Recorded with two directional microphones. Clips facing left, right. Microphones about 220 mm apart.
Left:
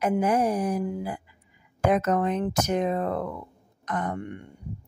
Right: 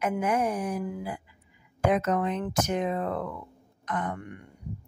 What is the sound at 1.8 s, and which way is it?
Speech, 45° left (ahead or behind).